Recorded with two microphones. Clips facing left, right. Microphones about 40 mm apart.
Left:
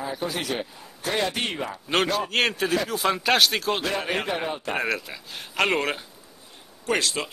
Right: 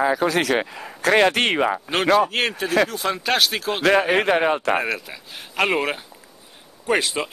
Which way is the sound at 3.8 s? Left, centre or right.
Right.